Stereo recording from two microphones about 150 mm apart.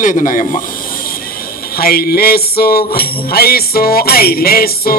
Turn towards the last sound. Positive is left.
turn(degrees=90)